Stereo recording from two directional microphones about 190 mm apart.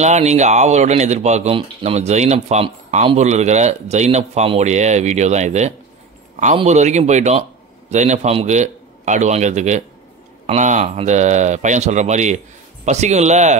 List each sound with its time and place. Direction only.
0.0 s speech: 35° right (ahead or behind)